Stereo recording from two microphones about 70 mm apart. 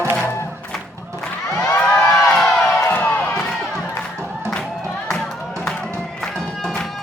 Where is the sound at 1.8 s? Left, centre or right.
Centre.